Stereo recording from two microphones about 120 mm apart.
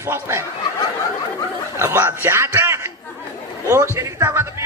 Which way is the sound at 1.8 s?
20° right (ahead or behind).